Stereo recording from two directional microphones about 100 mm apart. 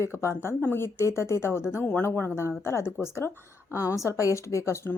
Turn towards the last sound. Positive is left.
turn(degrees=25)  # may be behind; listen again after turning